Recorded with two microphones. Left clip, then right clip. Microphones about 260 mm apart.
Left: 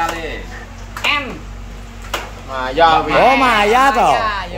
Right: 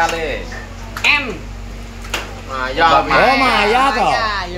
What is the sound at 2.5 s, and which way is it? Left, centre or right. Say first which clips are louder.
Speech: left 2 dB; left.